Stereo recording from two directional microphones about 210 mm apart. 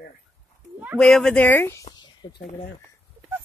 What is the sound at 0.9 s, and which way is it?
Speech, 5° left (ahead or behind).